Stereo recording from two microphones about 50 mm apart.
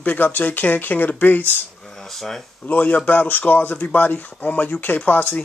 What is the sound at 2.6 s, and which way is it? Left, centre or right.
Speech, left.